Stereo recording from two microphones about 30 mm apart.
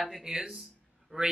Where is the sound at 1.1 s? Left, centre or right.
Left.